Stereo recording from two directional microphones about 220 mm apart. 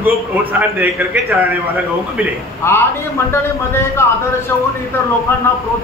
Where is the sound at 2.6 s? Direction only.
10° left (ahead or behind).